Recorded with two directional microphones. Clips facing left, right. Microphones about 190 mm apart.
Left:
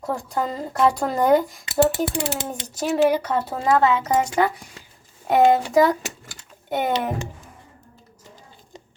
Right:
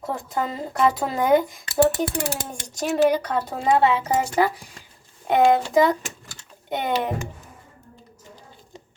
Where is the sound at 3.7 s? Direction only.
30° right (ahead or behind).